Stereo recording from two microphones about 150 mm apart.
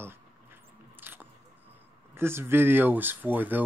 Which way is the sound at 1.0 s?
15° right (ahead or behind).